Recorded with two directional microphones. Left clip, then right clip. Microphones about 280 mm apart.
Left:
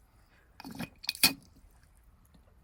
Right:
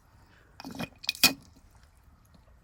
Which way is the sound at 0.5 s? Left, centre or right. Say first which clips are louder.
Right 4 dB; centre.